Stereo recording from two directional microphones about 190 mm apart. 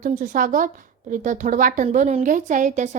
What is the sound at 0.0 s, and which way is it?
A woman's voice, 45° right (ahead or behind).